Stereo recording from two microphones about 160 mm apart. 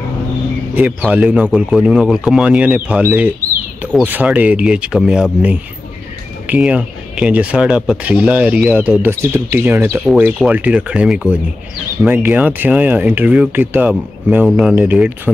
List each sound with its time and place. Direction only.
1.1 s speech: 10° right (ahead or behind)